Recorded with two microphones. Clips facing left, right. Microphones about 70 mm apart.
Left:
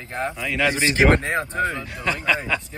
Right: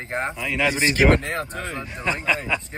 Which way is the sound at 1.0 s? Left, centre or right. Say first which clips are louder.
Left 2 dB; left.